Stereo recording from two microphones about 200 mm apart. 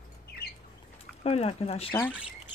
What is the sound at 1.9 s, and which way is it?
Speech, 10° left (ahead or behind).